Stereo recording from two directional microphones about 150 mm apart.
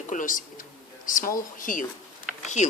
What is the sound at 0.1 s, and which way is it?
Speech, 60° left (ahead or behind).